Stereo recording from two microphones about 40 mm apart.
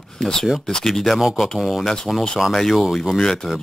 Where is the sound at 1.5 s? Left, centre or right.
Centre.